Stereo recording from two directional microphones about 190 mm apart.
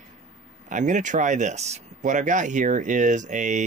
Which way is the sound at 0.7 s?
40° right (ahead or behind).